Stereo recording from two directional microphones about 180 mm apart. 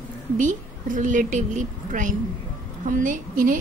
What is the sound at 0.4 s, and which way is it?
A woman's voice, 45° right (ahead or behind).